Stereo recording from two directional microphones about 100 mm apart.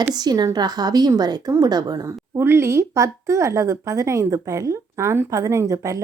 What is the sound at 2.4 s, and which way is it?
A woman's voice, 25° right (ahead or behind).